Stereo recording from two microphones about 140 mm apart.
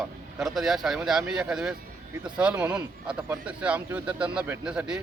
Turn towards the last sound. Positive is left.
turn(degrees=-5)  # may be behind; listen again after turning